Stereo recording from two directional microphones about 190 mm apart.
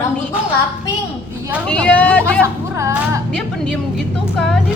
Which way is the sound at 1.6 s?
5° left (ahead or behind).